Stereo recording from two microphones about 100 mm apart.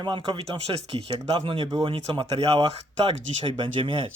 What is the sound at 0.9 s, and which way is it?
Speech, 65° right (ahead or behind).